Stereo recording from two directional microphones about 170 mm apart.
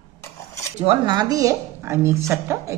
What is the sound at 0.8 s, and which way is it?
A woman's voice, 30° right (ahead or behind).